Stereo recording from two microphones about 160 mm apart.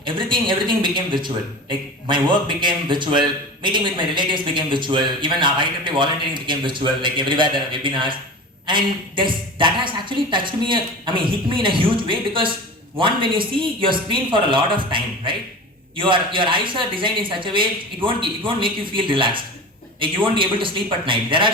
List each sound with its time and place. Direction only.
0.0 s a man's voice: 30° right (ahead or behind)